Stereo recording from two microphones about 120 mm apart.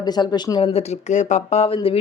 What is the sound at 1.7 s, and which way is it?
Speech, 50° left (ahead or behind).